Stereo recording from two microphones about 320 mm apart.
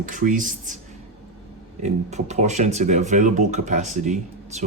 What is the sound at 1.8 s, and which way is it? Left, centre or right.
Speech, right.